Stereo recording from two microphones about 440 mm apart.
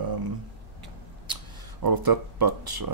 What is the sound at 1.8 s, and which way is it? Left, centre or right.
Speech, right.